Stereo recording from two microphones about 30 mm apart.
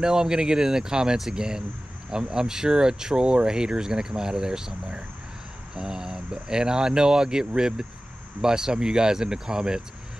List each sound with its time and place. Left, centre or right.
0.0 s speech: right
5.8 s speech: right